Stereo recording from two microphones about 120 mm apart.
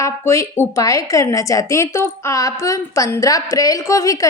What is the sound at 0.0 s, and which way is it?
A woman's voice, 25° left (ahead or behind).